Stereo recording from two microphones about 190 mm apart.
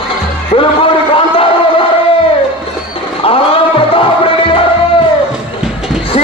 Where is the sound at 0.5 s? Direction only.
30° left (ahead or behind).